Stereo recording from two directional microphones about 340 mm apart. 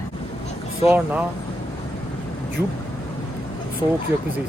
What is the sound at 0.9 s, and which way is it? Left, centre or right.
Speech, centre.